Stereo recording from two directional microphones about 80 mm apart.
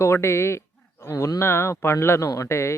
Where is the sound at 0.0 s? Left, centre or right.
Left.